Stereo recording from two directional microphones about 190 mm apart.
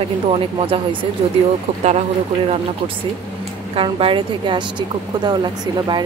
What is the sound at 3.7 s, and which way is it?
Speech, 30° right (ahead or behind).